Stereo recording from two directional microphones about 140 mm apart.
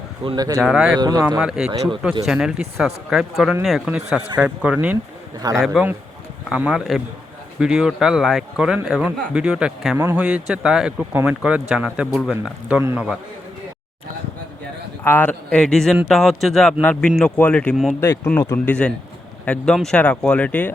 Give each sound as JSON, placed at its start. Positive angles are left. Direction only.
{"t": 0.3, "sound": "speech", "side_deg": -25}
{"t": 0.6, "sound": "speech", "side_deg": -5}
{"t": 0.9, "sound": "speech", "side_deg": -30}
{"t": 1.4, "sound": "speech", "side_deg": -5}
{"t": 15.0, "sound": "speech", "side_deg": 15}
{"t": 18.0, "sound": "speech", "side_deg": 20}